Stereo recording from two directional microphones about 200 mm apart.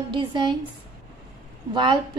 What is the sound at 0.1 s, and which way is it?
Speech, 25° right (ahead or behind).